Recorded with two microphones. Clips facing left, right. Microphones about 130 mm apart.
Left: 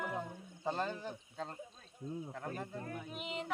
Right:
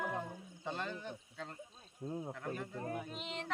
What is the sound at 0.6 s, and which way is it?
Snake, 35° left (ahead or behind).